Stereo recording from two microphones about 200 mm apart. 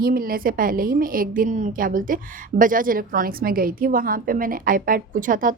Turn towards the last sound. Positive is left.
turn(degrees=-40)  # may be behind; listen again after turning